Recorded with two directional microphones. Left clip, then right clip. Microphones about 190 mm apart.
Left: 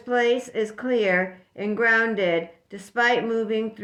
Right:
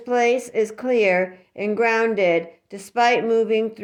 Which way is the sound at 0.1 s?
25° right (ahead or behind).